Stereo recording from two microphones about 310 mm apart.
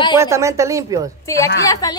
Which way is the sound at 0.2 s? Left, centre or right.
Centre.